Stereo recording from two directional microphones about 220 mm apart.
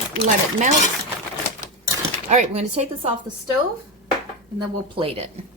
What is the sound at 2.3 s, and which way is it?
Speech, 30° right (ahead or behind).